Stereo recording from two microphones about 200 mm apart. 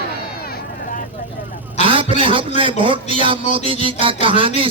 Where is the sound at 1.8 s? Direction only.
25° right (ahead or behind).